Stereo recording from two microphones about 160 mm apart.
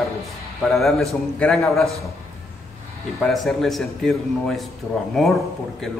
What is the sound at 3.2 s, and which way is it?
A man's voice, centre (ahead or behind).